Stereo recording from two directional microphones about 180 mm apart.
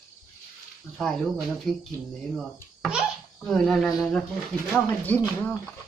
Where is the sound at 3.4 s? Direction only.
Centre (ahead or behind).